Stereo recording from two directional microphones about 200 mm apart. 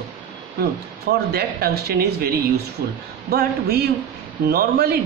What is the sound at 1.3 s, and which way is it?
Speech, 50° right (ahead or behind).